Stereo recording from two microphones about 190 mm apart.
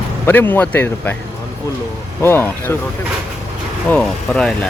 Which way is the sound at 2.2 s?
10° left (ahead or behind).